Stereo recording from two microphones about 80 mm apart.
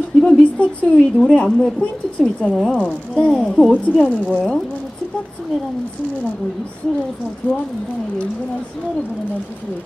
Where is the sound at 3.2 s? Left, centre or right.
Centre.